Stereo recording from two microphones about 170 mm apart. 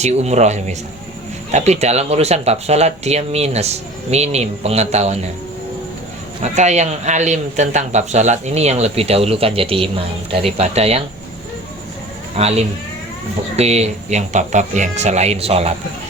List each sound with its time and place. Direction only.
0.0 s a man's voice: 40° right (ahead or behind)
6.4 s a man's voice: 40° right (ahead or behind)
12.4 s a man's voice: 35° right (ahead or behind)